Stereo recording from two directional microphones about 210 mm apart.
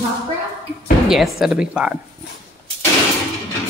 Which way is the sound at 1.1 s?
Centre (ahead or behind).